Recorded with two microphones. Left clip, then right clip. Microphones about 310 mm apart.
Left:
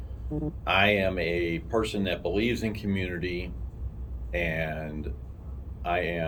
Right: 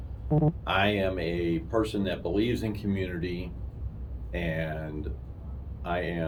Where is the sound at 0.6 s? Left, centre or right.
Centre.